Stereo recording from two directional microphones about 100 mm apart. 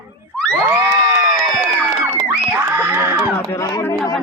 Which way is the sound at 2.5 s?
20° right (ahead or behind).